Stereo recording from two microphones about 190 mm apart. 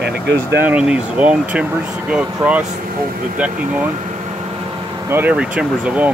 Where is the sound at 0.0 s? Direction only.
65° right (ahead or behind).